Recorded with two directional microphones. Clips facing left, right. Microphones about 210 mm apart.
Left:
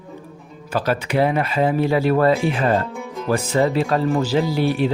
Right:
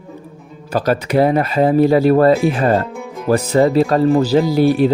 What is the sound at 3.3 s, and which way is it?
Speech, 40° right (ahead or behind).